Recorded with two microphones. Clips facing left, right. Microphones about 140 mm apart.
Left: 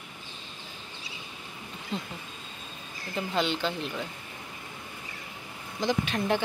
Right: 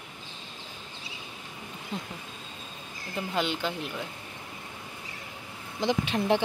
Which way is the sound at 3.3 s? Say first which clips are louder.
Left 1 dB; 10° right (ahead or behind).